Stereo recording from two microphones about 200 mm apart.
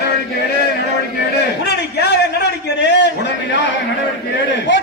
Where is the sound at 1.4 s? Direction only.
55° left (ahead or behind).